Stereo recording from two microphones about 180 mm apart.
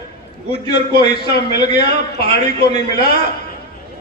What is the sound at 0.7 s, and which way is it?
Speech, 65° left (ahead or behind).